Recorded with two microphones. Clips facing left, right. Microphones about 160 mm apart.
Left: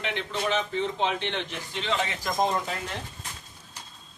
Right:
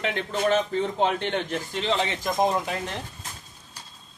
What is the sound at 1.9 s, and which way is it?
Speech, 30° right (ahead or behind).